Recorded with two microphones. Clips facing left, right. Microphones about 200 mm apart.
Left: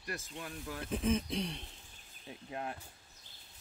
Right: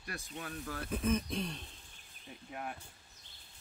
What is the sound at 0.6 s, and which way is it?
Speech, 15° left (ahead or behind).